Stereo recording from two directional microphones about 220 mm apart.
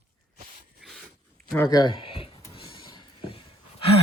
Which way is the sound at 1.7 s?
20° left (ahead or behind).